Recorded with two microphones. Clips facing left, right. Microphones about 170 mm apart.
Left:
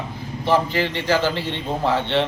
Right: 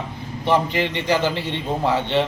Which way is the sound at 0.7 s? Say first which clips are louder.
Even; 20° right (ahead or behind).